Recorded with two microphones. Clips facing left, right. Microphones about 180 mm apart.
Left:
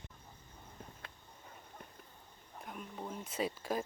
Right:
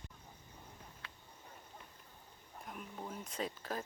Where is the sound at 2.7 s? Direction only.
Centre (ahead or behind).